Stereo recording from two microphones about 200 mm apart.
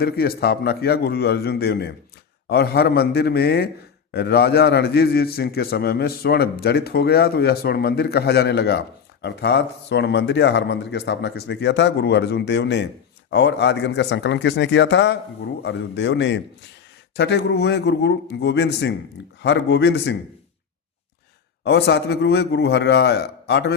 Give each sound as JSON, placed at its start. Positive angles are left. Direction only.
{"t": 0.0, "sound": "a man's voice", "side_deg": 50}
{"t": 21.6, "sound": "speech", "side_deg": 60}